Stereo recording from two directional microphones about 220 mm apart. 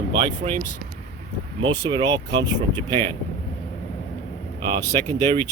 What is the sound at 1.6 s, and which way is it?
Speech, 20° right (ahead or behind).